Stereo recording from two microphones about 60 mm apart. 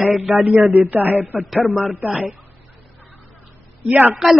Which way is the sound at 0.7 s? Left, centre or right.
Right.